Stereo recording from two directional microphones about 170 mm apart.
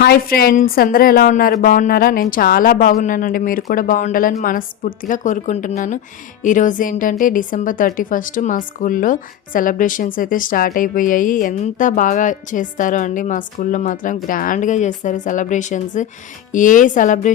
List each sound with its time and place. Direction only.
0.0 s a woman's voice: 65° left (ahead or behind); by 17.3 s 50° left (ahead or behind)